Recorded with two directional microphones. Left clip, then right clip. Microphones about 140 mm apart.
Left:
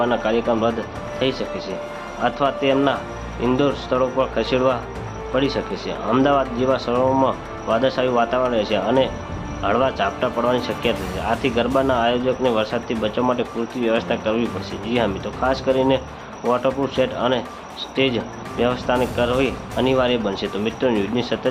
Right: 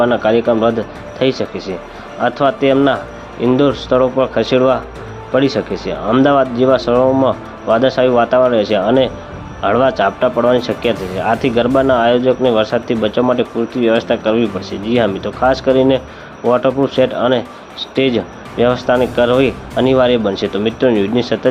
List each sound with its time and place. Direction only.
0.0 s speech: 35° right (ahead or behind)